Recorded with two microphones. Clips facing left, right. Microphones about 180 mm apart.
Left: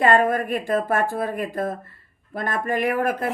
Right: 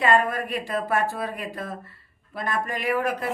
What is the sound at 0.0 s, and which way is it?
Speech, 50° left (ahead or behind).